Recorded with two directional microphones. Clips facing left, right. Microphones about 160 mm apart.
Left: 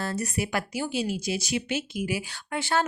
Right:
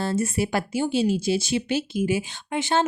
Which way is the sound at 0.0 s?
25° right (ahead or behind).